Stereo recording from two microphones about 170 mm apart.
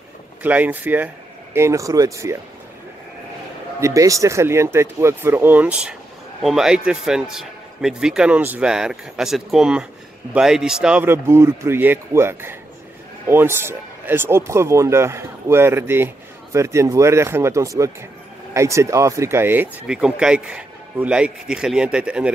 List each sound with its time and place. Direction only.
0.4 s speech: 10° right (ahead or behind)
3.8 s a man's voice: 20° right (ahead or behind)